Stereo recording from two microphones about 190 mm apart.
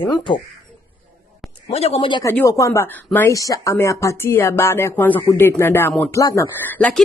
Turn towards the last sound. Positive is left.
turn(degrees=10)  # may be behind; listen again after turning